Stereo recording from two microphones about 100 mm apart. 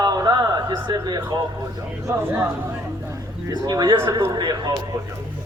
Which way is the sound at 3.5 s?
40° right (ahead or behind).